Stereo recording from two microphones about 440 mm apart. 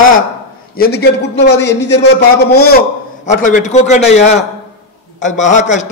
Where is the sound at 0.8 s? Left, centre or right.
Left.